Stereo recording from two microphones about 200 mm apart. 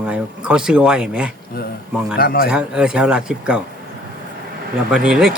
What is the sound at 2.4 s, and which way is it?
Speech, 5° right (ahead or behind).